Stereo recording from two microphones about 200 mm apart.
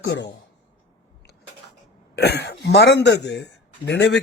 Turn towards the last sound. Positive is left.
turn(degrees=60)  # may be behind; listen again after turning